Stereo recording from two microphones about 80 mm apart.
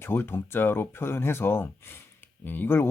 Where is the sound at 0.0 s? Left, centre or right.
Left.